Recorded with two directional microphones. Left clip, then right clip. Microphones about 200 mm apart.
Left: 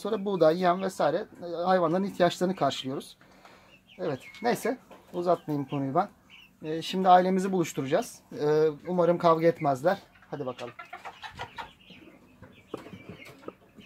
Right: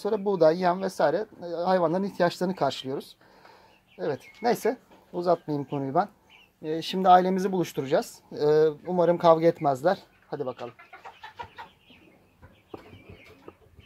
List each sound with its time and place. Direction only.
0.0 s speech: 25° right (ahead or behind)